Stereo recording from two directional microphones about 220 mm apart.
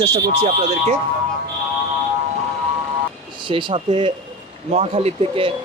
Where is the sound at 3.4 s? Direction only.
20° right (ahead or behind).